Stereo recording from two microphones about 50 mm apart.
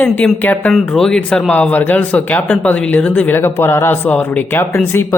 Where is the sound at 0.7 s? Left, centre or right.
Centre.